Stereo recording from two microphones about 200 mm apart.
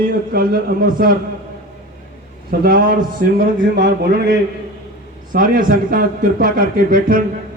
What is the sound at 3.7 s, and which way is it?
Speech, 60° right (ahead or behind).